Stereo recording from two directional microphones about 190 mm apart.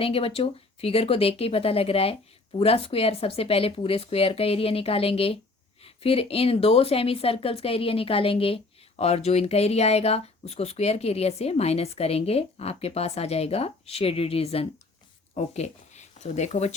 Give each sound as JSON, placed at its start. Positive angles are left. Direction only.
{"t": 0.0, "sound": "a woman's voice", "side_deg": 30}